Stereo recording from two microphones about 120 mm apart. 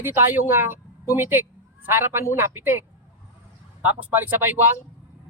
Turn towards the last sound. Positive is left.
turn(degrees=-15)  # may be behind; listen again after turning